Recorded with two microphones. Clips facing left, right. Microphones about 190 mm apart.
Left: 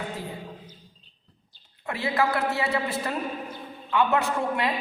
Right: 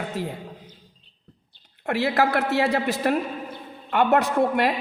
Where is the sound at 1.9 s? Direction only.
75° right (ahead or behind).